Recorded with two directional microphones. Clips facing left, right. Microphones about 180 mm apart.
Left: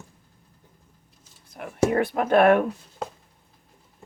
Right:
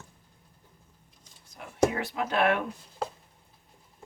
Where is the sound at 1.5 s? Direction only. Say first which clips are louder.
Left 4 dB; 60° left (ahead or behind).